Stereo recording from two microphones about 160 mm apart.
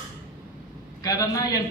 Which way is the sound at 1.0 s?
25° left (ahead or behind).